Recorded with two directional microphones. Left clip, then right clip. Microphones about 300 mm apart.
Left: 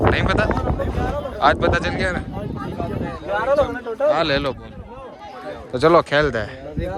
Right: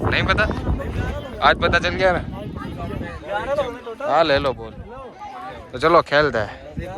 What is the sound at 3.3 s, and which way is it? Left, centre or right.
Speech, left.